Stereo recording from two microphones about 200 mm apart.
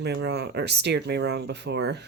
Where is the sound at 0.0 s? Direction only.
55° right (ahead or behind).